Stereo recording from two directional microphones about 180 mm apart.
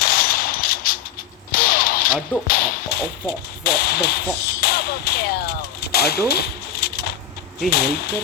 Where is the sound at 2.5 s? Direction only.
50° left (ahead or behind).